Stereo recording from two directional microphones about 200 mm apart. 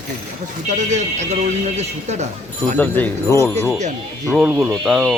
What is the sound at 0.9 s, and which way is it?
Speech, 35° right (ahead or behind).